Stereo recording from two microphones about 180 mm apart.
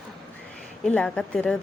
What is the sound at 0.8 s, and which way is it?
Speech, 5° left (ahead or behind).